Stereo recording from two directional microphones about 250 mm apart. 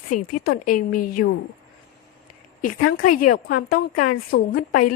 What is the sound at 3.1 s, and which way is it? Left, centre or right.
A woman's voice, left.